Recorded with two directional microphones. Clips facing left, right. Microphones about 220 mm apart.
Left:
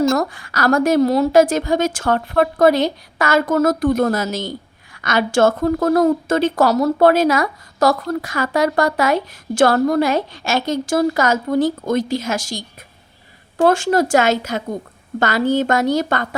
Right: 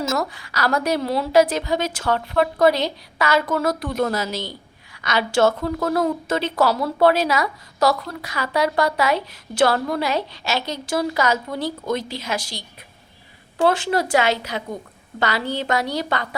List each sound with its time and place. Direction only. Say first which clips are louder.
0.2 s speech: left 4 dB; 50° left (ahead or behind)